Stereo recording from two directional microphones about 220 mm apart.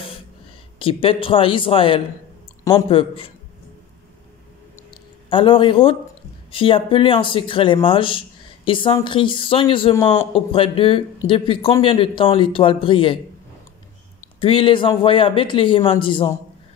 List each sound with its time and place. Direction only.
0.7 s speech: 25° left (ahead or behind)
5.3 s speech: 25° left (ahead or behind)
14.2 s speech: 25° left (ahead or behind)